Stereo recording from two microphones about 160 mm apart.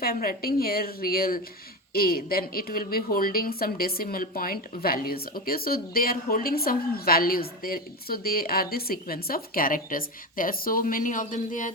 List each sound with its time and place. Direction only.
0.0 s speech: 65° left (ahead or behind)